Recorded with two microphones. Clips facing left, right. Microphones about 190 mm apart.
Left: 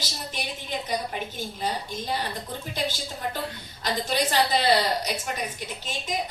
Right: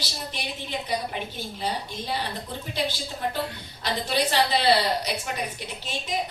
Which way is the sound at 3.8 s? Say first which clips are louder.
Even; 45° left (ahead or behind).